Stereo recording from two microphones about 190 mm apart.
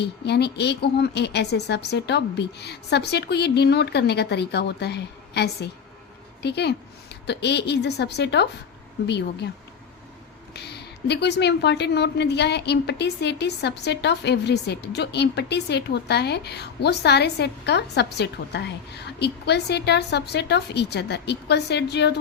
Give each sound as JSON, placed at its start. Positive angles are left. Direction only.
{"t": 0.0, "sound": "speech", "side_deg": 60}
{"t": 10.5, "sound": "speech", "side_deg": 60}